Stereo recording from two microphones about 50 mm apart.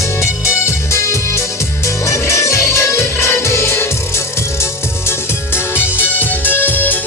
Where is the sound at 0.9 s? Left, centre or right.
Left.